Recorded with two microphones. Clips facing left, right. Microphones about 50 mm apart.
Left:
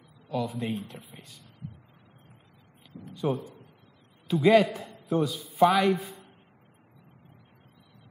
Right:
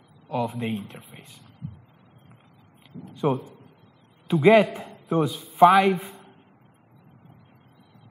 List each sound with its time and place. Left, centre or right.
0.4 s a man's voice: right
3.2 s a man's voice: right
4.7 s a sound: right
5.3 s a man's voice: right